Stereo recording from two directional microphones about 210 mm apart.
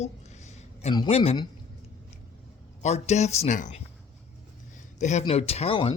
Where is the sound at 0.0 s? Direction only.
30° left (ahead or behind).